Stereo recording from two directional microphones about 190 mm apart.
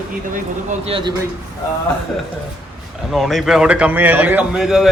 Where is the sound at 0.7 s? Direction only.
30° right (ahead or behind).